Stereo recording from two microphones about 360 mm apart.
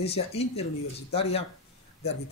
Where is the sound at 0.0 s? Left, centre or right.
Centre.